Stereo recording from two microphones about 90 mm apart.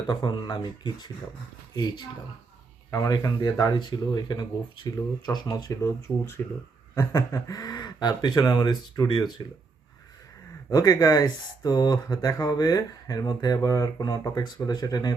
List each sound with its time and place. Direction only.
0.1 s speech: 55° left (ahead or behind)
5.8 s speech: 30° left (ahead or behind)
6.9 s speech: 40° left (ahead or behind)
10.7 s speech: 45° left (ahead or behind)